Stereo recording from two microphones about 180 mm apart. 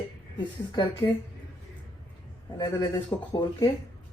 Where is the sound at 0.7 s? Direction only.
25° left (ahead or behind).